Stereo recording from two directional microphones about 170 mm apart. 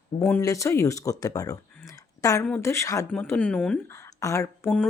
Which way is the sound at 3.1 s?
10° left (ahead or behind).